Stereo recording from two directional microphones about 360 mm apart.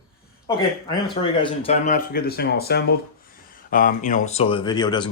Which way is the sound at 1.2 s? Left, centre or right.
Centre.